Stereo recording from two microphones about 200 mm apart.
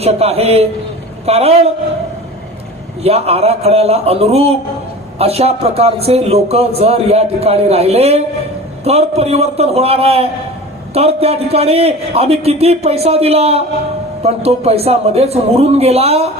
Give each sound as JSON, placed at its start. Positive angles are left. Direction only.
{"t": 0.0, "sound": "a man's voice", "side_deg": -30}
{"t": 3.0, "sound": "a man's voice", "side_deg": -30}